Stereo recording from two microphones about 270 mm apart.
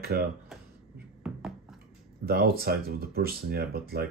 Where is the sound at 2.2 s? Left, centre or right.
Right.